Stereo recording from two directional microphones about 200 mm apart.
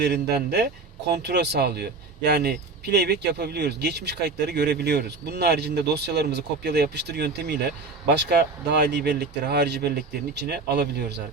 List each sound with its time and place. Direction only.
0.0 s speech: 55° right (ahead or behind)